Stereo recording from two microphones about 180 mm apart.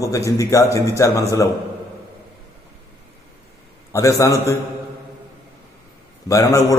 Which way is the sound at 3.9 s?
15° left (ahead or behind).